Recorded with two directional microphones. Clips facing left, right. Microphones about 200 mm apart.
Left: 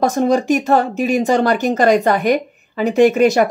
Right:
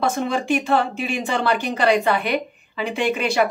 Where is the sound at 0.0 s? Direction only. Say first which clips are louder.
Left 7 dB; 40° left (ahead or behind).